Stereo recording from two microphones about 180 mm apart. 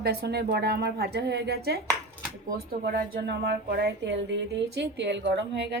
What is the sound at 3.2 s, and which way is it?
A woman's voice, 70° right (ahead or behind).